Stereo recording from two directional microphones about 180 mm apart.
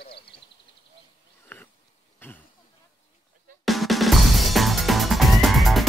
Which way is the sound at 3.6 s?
Centre (ahead or behind).